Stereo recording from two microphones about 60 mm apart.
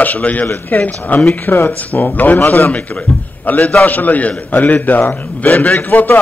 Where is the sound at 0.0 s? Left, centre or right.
Left.